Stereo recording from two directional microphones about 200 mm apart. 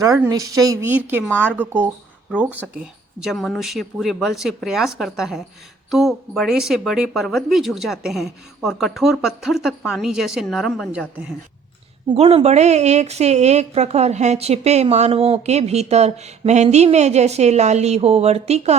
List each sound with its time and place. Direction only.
0.3 s speech: 15° right (ahead or behind); by 11.1 s centre (ahead or behind)
12.0 s a woman's voice: 30° right (ahead or behind)